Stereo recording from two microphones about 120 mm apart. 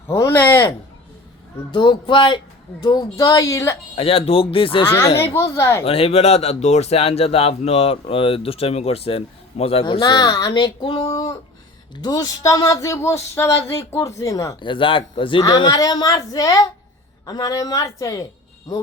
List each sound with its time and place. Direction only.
0.1 s a sound: 20° left (ahead or behind)
1.7 s speech: 40° left (ahead or behind); by 3.8 s 25° left (ahead or behind)
3.9 s speech: 55° left (ahead or behind)
5.1 s speech: 20° left (ahead or behind)
5.8 s speech: 55° left (ahead or behind)
10.0 s speech: 35° left (ahead or behind)
14.6 s speech: 45° left (ahead or behind); by 18.3 s 30° left (ahead or behind)